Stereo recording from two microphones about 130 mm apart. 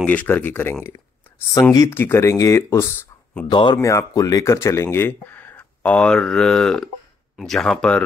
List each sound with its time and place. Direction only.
0.0 s speech: 10° left (ahead or behind)
1.5 s speech: 25° left (ahead or behind)
3.4 s speech: 35° left (ahead or behind)
3.8 s speech: 25° left (ahead or behind); by 8.0 s 5° left (ahead or behind)